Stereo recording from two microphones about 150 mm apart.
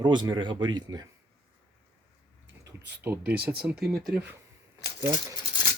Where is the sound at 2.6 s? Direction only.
15° right (ahead or behind).